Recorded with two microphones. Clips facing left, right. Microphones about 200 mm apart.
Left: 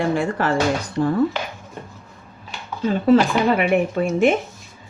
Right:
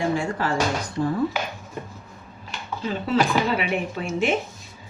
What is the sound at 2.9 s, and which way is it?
Speech, 50° left (ahead or behind).